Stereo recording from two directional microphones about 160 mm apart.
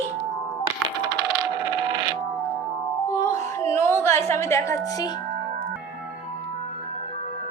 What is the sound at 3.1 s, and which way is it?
Music, 15° left (ahead or behind).